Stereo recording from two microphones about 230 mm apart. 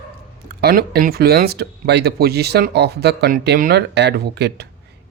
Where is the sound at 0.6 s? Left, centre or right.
Right.